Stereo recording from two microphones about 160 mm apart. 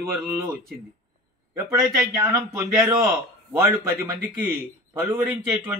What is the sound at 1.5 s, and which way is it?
A man's voice, 20° right (ahead or behind).